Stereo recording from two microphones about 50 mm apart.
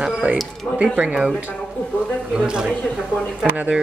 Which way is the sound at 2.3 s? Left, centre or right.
Centre.